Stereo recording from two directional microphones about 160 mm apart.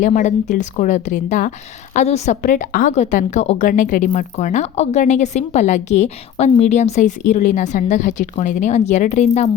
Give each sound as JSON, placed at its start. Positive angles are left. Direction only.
{"t": 0.0, "sound": "a woman's voice", "side_deg": 50}